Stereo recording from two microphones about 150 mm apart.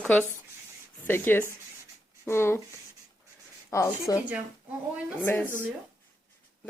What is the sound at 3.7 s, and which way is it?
Speech, 20° left (ahead or behind).